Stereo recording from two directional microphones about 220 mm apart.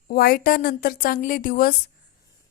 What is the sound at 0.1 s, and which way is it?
Speech, 45° left (ahead or behind).